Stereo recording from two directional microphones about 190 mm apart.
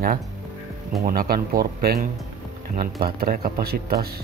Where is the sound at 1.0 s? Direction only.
50° right (ahead or behind).